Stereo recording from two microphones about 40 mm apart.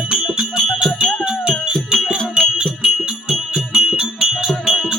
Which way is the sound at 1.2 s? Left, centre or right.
Centre.